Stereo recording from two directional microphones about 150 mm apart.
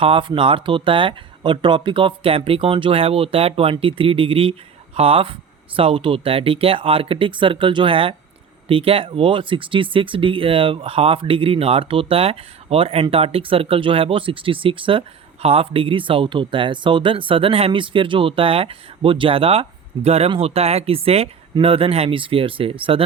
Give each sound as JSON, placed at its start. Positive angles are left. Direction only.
{"t": 0.0, "sound": "speech", "side_deg": -35}